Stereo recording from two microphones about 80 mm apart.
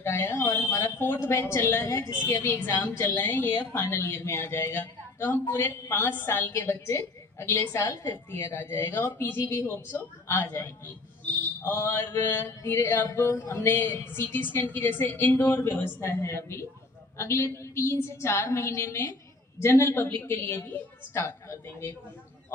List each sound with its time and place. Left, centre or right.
0.0 s a woman's voice: left
20.2 s a man's voice: left
21.2 s a woman's voice: left